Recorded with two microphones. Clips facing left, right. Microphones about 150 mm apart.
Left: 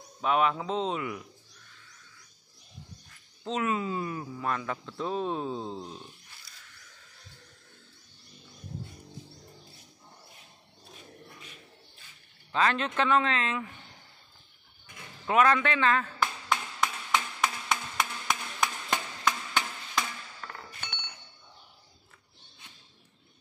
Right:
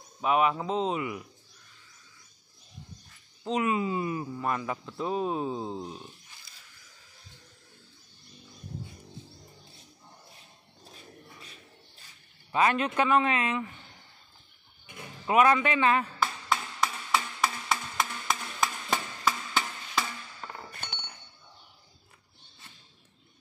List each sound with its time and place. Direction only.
0.2 s a man's voice: 5° right (ahead or behind)
3.4 s speech: 10° right (ahead or behind)
12.5 s speech: 10° right (ahead or behind)
15.2 s speech: 10° right (ahead or behind)
16.4 s a sound: 5° right (ahead or behind)
20.4 s chink: 20° right (ahead or behind)